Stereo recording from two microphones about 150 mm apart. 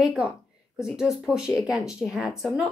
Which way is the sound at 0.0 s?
5° right (ahead or behind).